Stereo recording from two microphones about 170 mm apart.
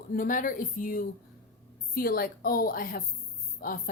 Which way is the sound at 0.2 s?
50° left (ahead or behind).